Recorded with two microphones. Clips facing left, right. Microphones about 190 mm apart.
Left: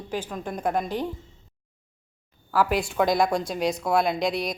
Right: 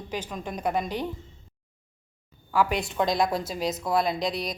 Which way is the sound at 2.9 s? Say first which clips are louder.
Left 3 dB; centre (ahead or behind).